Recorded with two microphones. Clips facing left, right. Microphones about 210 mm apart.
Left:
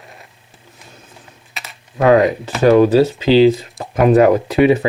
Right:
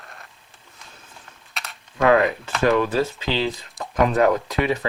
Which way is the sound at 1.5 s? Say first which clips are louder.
Left 2 dB; centre (ahead or behind).